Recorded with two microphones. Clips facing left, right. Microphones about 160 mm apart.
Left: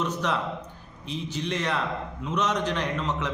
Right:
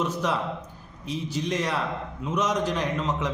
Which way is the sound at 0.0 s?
10° right (ahead or behind).